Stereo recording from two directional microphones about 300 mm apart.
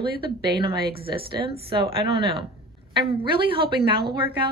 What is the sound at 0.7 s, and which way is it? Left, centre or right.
Speech, right.